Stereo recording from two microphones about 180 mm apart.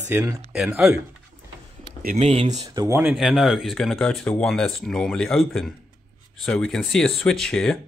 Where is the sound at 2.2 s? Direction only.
40° right (ahead or behind).